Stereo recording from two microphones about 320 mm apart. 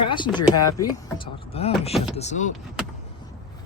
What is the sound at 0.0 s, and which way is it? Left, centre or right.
Speech, centre.